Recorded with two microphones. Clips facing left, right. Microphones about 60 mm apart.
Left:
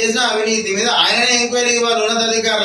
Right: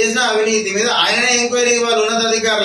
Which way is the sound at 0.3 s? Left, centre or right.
Right.